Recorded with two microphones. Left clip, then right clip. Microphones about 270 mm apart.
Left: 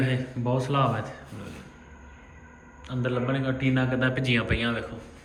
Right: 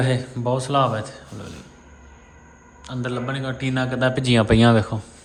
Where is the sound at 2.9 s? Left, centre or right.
Centre.